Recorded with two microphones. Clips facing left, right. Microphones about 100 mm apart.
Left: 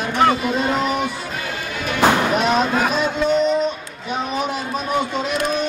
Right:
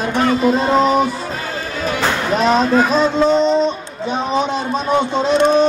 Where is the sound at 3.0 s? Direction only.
30° right (ahead or behind).